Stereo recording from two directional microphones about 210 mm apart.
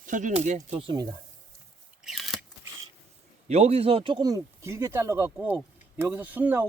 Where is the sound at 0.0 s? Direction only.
40° right (ahead or behind).